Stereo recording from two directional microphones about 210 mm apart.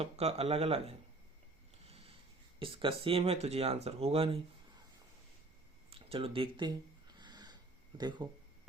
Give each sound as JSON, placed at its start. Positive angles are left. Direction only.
{"t": 0.0, "sound": "speech", "side_deg": -30}
{"t": 1.9, "sound": "a sound", "side_deg": -25}
{"t": 2.6, "sound": "speech", "side_deg": -25}
{"t": 5.9, "sound": "speech", "side_deg": -25}
{"t": 7.2, "sound": "snort", "side_deg": -20}
{"t": 7.9, "sound": "speech", "side_deg": -20}